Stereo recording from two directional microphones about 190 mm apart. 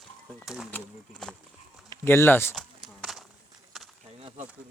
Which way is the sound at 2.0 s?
10° left (ahead or behind).